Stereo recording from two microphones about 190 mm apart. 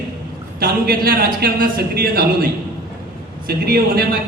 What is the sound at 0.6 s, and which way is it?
A man's voice, 50° right (ahead or behind).